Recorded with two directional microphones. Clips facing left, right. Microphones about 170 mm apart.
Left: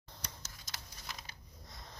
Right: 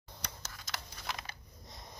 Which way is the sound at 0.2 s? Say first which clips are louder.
Right 4 dB; 70° right (ahead or behind).